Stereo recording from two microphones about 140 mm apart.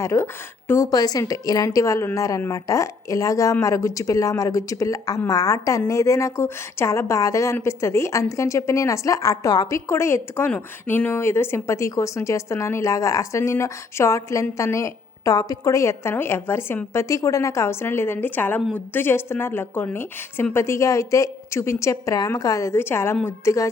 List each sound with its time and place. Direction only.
0.0 s speech: 20° left (ahead or behind)